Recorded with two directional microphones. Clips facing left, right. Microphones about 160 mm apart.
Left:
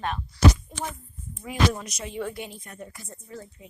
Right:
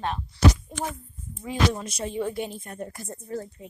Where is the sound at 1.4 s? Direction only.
30° right (ahead or behind).